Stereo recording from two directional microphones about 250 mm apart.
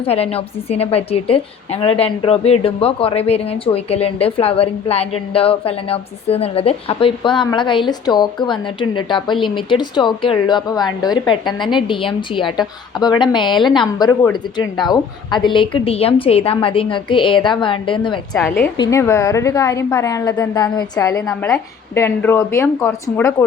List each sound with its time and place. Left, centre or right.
0.0 s a woman's voice: left
18.3 s a woman's voice: centre